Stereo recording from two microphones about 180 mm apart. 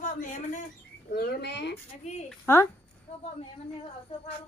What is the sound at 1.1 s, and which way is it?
Speech, 65° left (ahead or behind).